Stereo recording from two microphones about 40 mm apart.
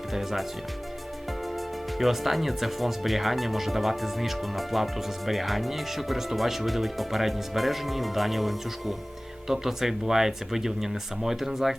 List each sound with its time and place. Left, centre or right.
0.1 s speech: centre
2.0 s speech: centre